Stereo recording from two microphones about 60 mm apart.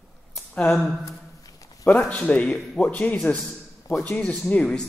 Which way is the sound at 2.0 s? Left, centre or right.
Left.